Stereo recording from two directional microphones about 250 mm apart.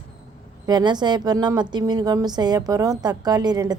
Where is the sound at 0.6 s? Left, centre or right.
Centre.